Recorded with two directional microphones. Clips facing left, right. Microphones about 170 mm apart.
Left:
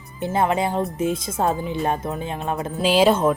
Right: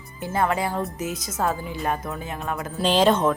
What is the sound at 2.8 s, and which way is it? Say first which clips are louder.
Speech: left 2 dB; 10° left (ahead or behind).